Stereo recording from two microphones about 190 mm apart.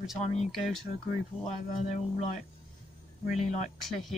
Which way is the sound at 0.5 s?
Centre (ahead or behind).